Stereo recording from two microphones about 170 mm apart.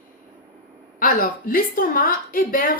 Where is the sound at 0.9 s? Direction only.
55° left (ahead or behind).